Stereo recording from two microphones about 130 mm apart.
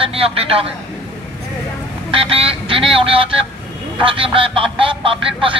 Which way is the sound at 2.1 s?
45° right (ahead or behind).